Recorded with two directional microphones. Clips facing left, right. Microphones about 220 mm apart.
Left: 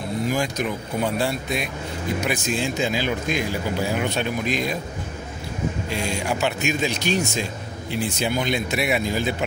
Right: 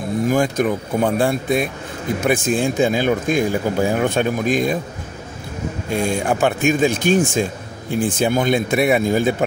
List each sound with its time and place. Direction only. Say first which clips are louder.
0.3 s speech: right 9 dB; 50° right (ahead or behind)
5.9 s speech: right 10 dB; 50° right (ahead or behind)